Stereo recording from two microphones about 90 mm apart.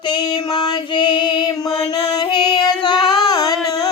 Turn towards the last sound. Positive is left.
turn(degrees=40)  # may be behind; listen again after turning